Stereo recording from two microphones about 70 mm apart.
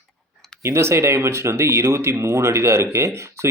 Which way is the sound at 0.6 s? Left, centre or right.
Right.